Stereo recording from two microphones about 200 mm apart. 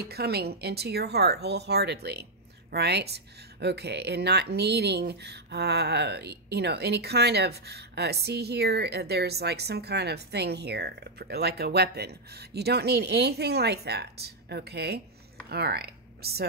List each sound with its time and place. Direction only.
0.0 s speech: 50° right (ahead or behind)